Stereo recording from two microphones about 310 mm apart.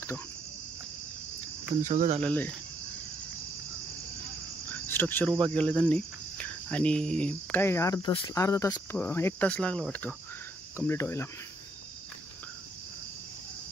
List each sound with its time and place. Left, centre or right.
1.8 s cricket: right
2.2 s cricket: centre
4.6 s cricket: centre